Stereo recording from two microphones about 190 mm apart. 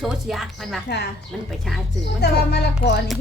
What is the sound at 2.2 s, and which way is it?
Speech, 60° left (ahead or behind).